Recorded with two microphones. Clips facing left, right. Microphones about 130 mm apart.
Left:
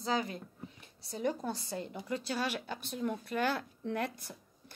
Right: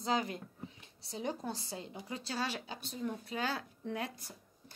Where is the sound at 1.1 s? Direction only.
55° left (ahead or behind).